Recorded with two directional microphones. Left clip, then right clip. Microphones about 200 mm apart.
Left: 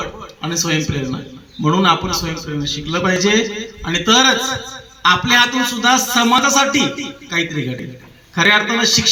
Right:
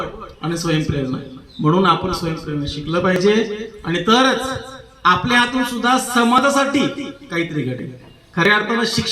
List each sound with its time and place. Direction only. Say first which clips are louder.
0.4 s a man's voice: left 2 dB; 25° left (ahead or behind)